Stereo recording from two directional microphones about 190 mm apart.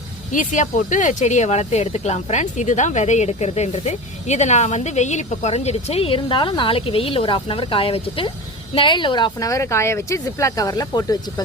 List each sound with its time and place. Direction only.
0.3 s speech: 40° left (ahead or behind); by 11.4 s 20° left (ahead or behind)